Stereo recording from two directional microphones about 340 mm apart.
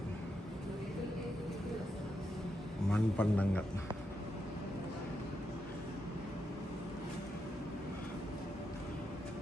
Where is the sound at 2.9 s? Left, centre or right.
Centre.